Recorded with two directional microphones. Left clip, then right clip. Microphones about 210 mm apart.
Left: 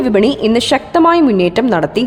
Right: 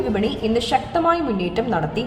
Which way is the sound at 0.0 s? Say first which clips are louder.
Left 10 dB; 45° left (ahead or behind).